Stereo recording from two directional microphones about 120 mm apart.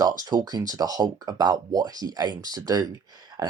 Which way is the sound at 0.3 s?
35° right (ahead or behind).